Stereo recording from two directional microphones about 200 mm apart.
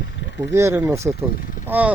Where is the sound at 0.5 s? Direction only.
15° right (ahead or behind).